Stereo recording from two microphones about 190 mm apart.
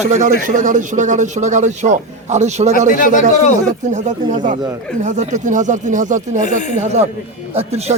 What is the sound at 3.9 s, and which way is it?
Speech, 40° right (ahead or behind).